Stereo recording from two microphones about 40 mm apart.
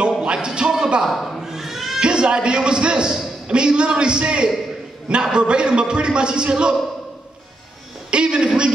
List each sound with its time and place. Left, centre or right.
0.2 s a sound: right
1.4 s cat: centre
2.0 s a man's voice: right
8.1 s a man's voice: right